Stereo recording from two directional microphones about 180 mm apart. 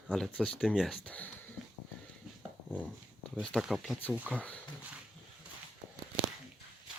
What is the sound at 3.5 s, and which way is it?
Speech, centre (ahead or behind).